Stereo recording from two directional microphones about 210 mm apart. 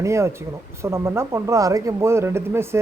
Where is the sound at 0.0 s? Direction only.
15° right (ahead or behind).